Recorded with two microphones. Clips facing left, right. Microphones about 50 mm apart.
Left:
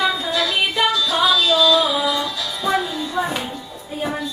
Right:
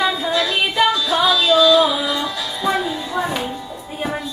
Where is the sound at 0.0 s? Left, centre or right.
Centre.